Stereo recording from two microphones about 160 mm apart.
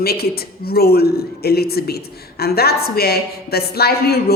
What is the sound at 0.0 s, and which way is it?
A woman's voice, 75° left (ahead or behind).